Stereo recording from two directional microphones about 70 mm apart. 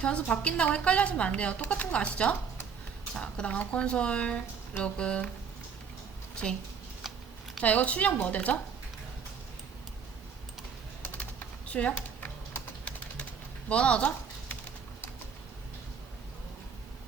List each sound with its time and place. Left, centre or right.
0.0 s a woman's voice: centre
7.6 s a woman's voice: centre
11.0 s typing: left
12.2 s typing: left
13.7 s speech: centre